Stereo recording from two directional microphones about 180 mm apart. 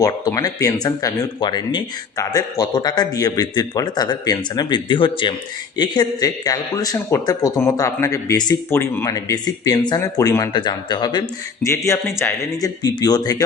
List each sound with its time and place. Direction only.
0.0 s a man's voice: 20° left (ahead or behind)